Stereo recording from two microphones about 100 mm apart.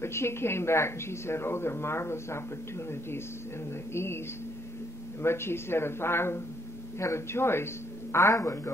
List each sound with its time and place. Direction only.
0.0 s speech: 25° left (ahead or behind)
3.9 s speech: 25° left (ahead or behind)
5.2 s speech: 25° left (ahead or behind)